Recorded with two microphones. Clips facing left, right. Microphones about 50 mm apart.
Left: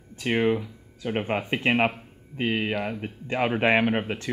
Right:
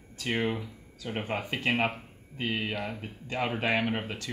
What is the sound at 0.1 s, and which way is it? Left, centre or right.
Speech, left.